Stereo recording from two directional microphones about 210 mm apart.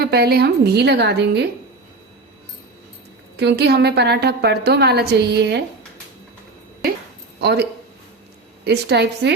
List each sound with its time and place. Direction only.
0.0 s a woman's voice: 50° right (ahead or behind)
3.3 s a woman's voice: 50° right (ahead or behind)
7.3 s a woman's voice: 50° right (ahead or behind)